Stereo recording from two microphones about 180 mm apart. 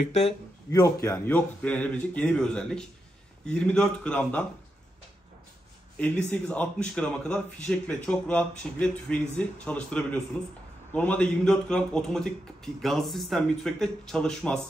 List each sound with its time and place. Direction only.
0.0 s speech: 40° left (ahead or behind)
0.7 s speech: 20° left (ahead or behind)
5.9 s a man's voice: 5° left (ahead or behind)